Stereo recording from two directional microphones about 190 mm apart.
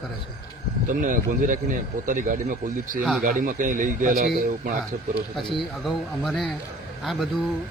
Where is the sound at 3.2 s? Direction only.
45° right (ahead or behind).